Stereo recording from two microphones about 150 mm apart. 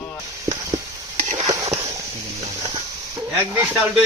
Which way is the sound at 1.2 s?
55° right (ahead or behind).